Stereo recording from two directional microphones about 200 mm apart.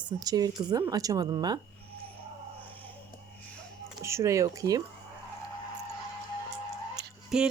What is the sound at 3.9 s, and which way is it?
Speech, 15° right (ahead or behind).